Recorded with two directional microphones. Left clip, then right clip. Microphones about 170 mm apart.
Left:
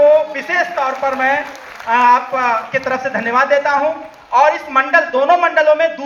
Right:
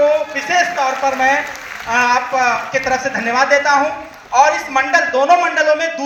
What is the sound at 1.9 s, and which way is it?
A man's voice, 35° right (ahead or behind).